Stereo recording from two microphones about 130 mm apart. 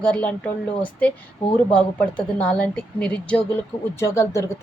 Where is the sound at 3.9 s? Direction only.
20° left (ahead or behind).